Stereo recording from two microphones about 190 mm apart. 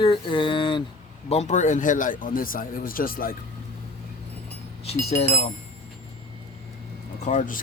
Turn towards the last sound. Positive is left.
turn(degrees=40)  # may be behind; listen again after turning